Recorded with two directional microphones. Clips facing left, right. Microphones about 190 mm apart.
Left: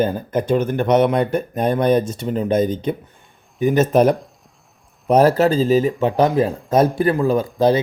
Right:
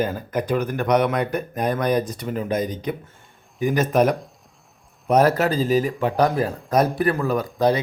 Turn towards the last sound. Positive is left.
turn(degrees=25)  # may be behind; listen again after turning